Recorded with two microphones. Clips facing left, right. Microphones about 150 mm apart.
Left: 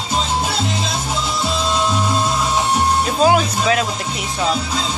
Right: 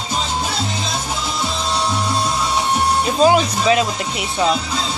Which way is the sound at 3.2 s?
Centre (ahead or behind).